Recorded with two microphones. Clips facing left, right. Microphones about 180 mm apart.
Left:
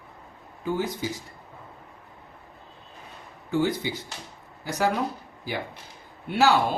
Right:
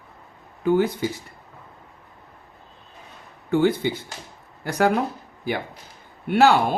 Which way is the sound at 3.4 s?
60° right (ahead or behind).